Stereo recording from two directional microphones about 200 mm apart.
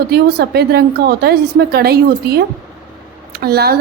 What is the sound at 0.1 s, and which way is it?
A woman's voice, 55° right (ahead or behind).